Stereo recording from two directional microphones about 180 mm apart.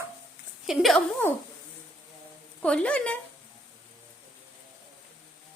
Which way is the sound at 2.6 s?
5° left (ahead or behind).